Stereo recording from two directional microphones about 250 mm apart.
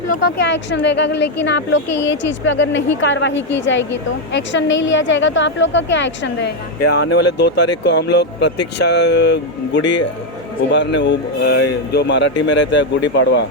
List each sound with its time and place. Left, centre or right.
0.1 s a woman's voice: left